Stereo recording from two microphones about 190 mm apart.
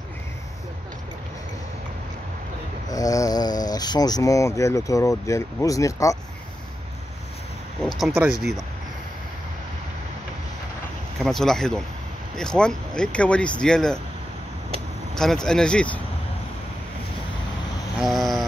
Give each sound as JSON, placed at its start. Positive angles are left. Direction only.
{"t": 2.9, "sound": "speech", "side_deg": 20}
{"t": 8.1, "sound": "speech", "side_deg": -5}
{"t": 11.1, "sound": "speech", "side_deg": 0}
{"t": 15.1, "sound": "speech", "side_deg": 5}
{"t": 17.9, "sound": "a sound", "side_deg": 0}